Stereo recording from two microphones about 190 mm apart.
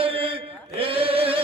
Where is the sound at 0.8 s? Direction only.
30° right (ahead or behind).